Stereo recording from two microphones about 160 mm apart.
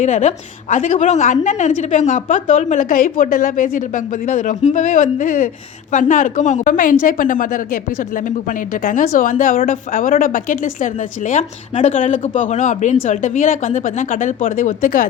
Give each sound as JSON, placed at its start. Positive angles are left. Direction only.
{"t": 0.0, "sound": "a woman's voice", "side_deg": 50}